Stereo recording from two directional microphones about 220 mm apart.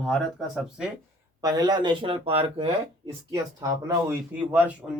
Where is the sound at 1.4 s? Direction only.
15° right (ahead or behind).